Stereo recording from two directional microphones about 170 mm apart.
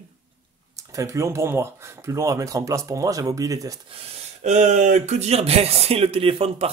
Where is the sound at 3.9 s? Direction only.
40° right (ahead or behind).